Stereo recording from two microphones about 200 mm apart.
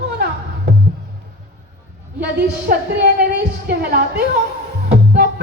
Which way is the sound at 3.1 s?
55° right (ahead or behind).